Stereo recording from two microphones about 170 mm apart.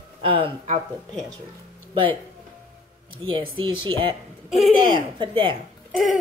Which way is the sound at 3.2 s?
30° right (ahead or behind).